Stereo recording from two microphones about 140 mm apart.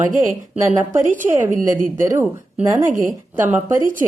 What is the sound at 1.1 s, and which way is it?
Speech, 70° right (ahead or behind).